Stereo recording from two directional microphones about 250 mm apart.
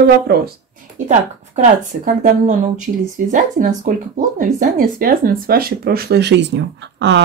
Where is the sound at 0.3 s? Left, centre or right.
Right.